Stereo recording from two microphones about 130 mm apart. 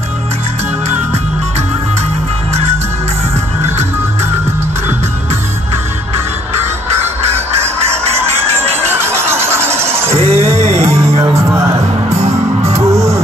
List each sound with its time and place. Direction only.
7.2 s honk: 55° right (ahead or behind)
8.9 s a sound: 20° right (ahead or behind)
9.9 s music: 55° right (ahead or behind)
11.3 s music: 20° right (ahead or behind)
12.2 s music: 60° right (ahead or behind)
12.9 s music: 20° right (ahead or behind)